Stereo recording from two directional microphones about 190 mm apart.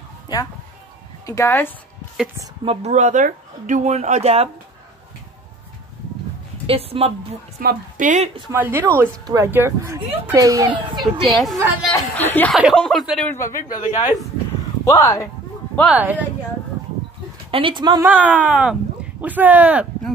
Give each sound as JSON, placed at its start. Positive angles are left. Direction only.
{"t": 1.2, "sound": "speech", "side_deg": 15}
{"t": 2.6, "sound": "speech", "side_deg": -35}
{"t": 6.6, "sound": "a woman's voice", "side_deg": -30}
{"t": 7.6, "sound": "speech", "side_deg": -40}
{"t": 8.5, "sound": "speech", "side_deg": -10}
{"t": 11.2, "sound": "speech", "side_deg": 0}
{"t": 13.3, "sound": "speech", "side_deg": 15}
{"t": 13.6, "sound": "speech", "side_deg": 45}
{"t": 14.9, "sound": "speech", "side_deg": 15}
{"t": 15.9, "sound": "speech", "side_deg": -10}
{"t": 17.5, "sound": "speech", "side_deg": -25}
{"t": 18.0, "sound": "speech", "side_deg": -10}